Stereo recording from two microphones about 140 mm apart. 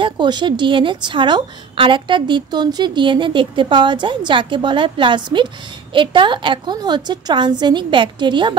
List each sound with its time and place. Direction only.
0.0 s a woman's voice: 35° right (ahead or behind)